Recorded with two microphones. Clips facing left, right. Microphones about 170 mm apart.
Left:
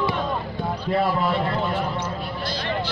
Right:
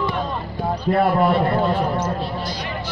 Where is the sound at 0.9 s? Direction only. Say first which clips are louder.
Right 5 dB; 60° right (ahead or behind).